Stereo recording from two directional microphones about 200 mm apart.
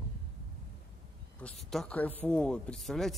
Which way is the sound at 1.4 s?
5° left (ahead or behind).